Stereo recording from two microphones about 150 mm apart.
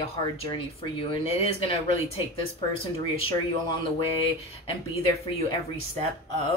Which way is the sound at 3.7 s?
35° left (ahead or behind).